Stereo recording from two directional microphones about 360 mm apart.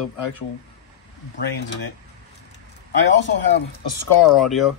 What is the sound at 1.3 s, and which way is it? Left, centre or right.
Speech, left.